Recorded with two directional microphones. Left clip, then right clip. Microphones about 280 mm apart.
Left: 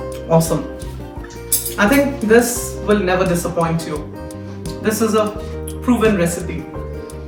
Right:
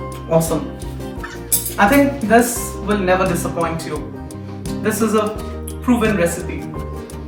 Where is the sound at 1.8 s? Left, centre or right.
Centre.